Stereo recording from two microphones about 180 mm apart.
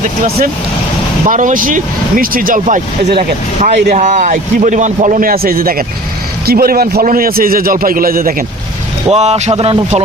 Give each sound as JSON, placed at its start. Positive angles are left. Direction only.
{"t": 1.3, "sound": "a man's voice", "side_deg": -45}
{"t": 3.2, "sound": "a man's voice", "side_deg": -35}
{"t": 9.0, "sound": "speech", "side_deg": -35}